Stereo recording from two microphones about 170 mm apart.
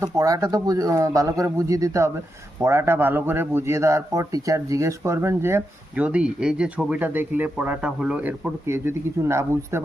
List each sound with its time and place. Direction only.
0.0 s a man's voice: 20° right (ahead or behind)